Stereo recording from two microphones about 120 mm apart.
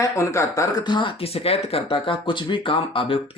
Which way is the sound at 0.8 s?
40° left (ahead or behind).